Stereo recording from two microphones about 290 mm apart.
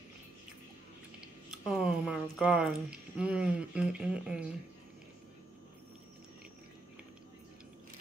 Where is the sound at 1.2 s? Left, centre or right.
Centre.